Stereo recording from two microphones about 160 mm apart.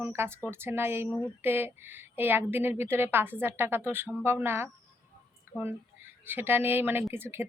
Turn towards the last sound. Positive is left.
turn(degrees=-15)  # may be behind; listen again after turning